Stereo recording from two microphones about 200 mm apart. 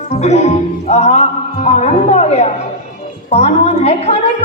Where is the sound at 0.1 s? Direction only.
35° left (ahead or behind).